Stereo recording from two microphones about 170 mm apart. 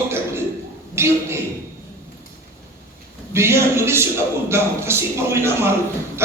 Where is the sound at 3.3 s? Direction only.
15° right (ahead or behind).